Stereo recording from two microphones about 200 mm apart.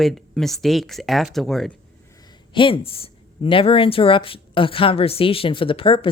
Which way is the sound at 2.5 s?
25° left (ahead or behind).